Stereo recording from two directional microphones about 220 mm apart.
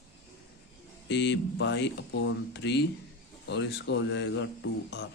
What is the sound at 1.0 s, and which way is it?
Speech, 50° left (ahead or behind).